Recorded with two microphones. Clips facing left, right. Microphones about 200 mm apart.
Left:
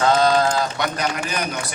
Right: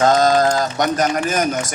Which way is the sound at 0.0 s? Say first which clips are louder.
Right 3 dB; 45° right (ahead or behind).